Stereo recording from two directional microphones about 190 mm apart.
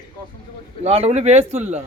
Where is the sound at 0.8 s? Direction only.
30° right (ahead or behind).